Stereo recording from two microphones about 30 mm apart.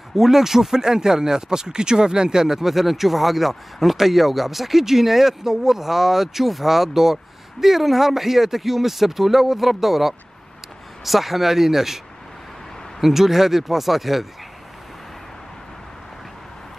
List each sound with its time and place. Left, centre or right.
0.1 s speech: centre
13.0 s speech: centre